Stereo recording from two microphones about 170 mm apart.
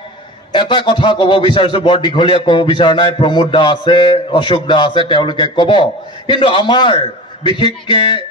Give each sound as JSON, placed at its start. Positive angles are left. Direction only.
{"t": 0.5, "sound": "a man's voice", "side_deg": 25}